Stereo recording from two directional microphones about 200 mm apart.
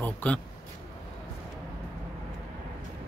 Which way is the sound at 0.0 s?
5° left (ahead or behind).